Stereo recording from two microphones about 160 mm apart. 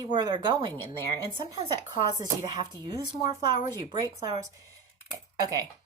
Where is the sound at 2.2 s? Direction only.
25° right (ahead or behind).